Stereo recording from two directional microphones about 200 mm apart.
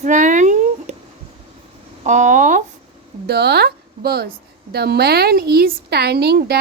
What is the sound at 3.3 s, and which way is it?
A woman's voice, 55° right (ahead or behind).